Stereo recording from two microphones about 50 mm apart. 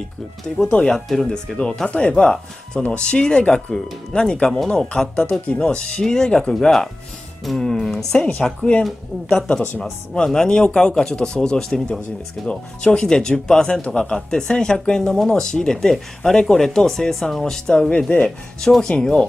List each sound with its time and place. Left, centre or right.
0.9 s speech: centre
1.3 s speech: centre
8.5 s speech: left